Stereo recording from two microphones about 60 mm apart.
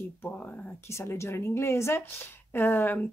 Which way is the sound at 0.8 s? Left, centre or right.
Left.